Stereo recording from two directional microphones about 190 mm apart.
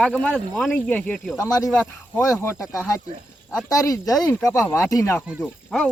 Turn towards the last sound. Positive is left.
turn(degrees=0)  # may be behind; listen again after turning